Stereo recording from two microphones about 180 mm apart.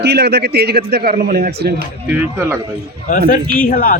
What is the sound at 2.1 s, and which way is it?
Speech, 15° right (ahead or behind).